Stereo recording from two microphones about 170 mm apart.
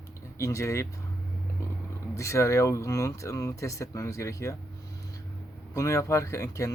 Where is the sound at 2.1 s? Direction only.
20° left (ahead or behind).